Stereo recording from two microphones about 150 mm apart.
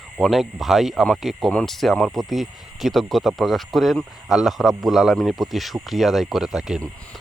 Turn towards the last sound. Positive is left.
turn(degrees=-5)  # may be behind; listen again after turning